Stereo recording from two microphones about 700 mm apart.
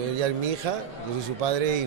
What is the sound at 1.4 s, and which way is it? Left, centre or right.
Speech, right.